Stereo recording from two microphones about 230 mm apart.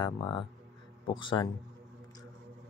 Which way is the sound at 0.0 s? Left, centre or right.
Centre.